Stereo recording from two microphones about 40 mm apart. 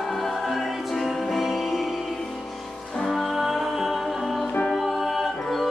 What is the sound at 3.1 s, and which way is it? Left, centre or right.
Music, centre.